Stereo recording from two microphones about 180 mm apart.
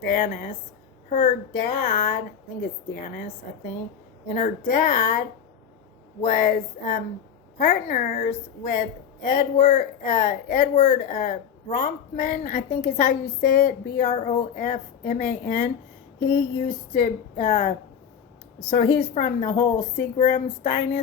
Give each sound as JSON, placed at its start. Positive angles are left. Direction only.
{"t": 0.0, "sound": "a woman's voice", "side_deg": 55}
{"t": 6.2, "sound": "a woman's voice", "side_deg": 50}
{"t": 9.3, "sound": "a woman's voice", "side_deg": 45}